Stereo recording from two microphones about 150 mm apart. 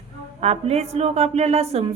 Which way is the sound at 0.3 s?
45° right (ahead or behind).